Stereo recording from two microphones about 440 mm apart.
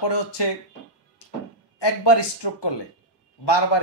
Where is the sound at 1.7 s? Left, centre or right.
Left.